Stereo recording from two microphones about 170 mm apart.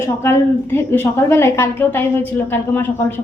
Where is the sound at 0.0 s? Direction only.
15° left (ahead or behind).